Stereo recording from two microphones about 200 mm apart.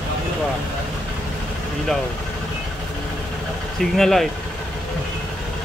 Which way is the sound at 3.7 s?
Centre (ahead or behind).